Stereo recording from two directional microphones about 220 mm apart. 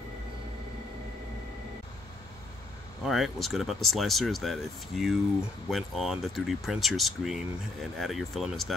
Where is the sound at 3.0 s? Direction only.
Centre (ahead or behind).